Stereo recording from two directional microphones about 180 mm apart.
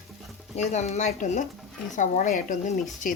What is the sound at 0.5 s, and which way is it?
A woman's voice, 40° left (ahead or behind).